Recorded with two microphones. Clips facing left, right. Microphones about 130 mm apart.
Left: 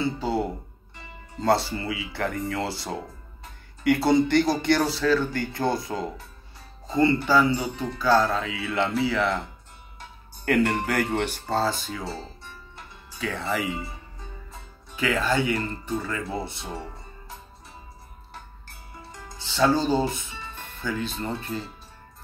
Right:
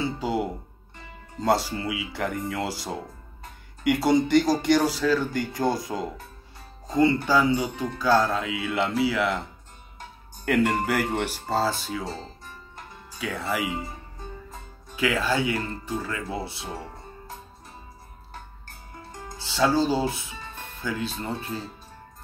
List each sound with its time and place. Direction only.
0.0 s music: 15° right (ahead or behind)
1.4 s speech: 10° right (ahead or behind)
7.7 s speech: 45° right (ahead or behind)
8.0 s speech: 10° right (ahead or behind)
10.4 s speech: 5° right (ahead or behind)
12.4 s music: 45° right (ahead or behind)
13.2 s speech: 5° right (ahead or behind)
15.0 s speech: 10° right (ahead or behind)
19.3 s speech: 10° right (ahead or behind)